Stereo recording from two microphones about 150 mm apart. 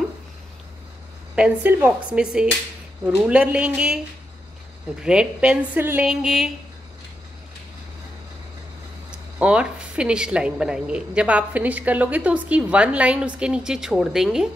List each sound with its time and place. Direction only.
1.3 s a woman's voice: 10° right (ahead or behind)
5.0 s a woman's voice: 5° right (ahead or behind)
9.4 s a woman's voice: 5° right (ahead or behind)